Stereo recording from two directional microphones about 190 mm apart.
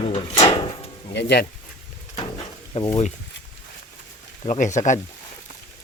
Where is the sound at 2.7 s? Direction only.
30° left (ahead or behind).